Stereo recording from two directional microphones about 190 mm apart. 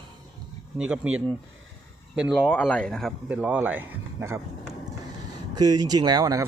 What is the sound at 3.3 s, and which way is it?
Speech, 5° right (ahead or behind).